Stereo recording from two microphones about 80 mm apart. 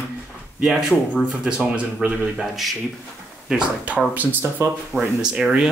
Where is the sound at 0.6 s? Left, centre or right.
Centre.